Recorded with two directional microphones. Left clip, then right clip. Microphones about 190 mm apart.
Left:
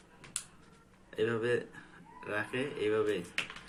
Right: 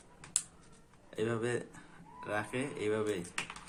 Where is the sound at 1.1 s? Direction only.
30° right (ahead or behind).